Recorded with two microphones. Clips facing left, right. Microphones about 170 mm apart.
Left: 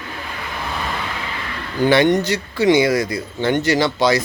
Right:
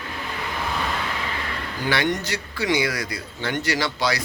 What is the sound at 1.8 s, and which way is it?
Speech, 25° left (ahead or behind).